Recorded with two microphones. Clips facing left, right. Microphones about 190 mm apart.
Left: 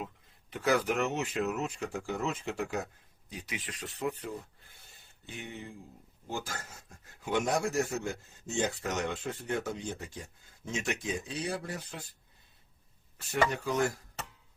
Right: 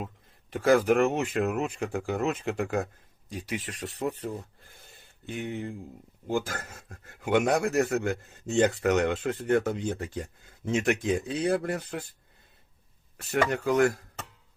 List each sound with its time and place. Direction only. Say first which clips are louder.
0.6 s speech: right 7 dB; 50° right (ahead or behind)
3.4 s speech: right 7 dB; 45° right (ahead or behind)
5.3 s speech: right 9 dB; 55° right (ahead or behind)
13.3 s speech: right 5 dB; 55° right (ahead or behind)